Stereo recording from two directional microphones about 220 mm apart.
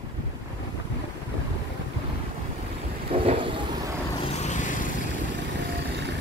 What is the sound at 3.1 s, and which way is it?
Vehicle, 25° right (ahead or behind).